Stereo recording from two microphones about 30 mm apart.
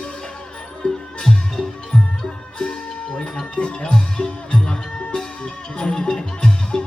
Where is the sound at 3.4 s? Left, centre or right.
Left.